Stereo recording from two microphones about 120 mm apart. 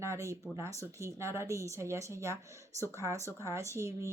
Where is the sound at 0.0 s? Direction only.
25° right (ahead or behind).